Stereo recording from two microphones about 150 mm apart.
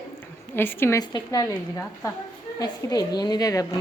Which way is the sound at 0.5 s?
15° left (ahead or behind).